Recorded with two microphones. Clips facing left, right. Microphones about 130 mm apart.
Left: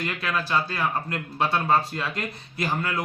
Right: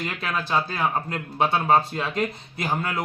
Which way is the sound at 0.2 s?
20° right (ahead or behind).